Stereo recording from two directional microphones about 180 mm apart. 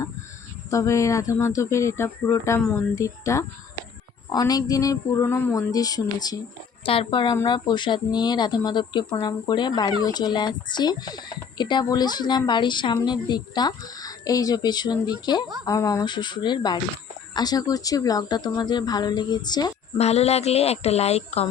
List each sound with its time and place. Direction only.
0.7 s speech: 15° left (ahead or behind)
20.0 s speech: 35° left (ahead or behind)